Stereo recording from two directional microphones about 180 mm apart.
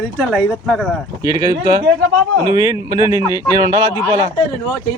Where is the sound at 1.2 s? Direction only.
20° right (ahead or behind).